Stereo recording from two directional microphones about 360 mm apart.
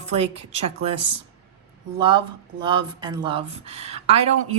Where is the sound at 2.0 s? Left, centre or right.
Centre.